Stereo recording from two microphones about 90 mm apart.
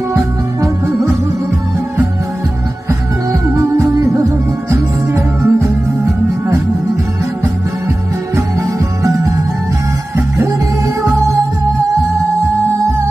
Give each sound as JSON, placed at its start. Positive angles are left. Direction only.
{"t": 3.5, "sound": "music", "side_deg": -30}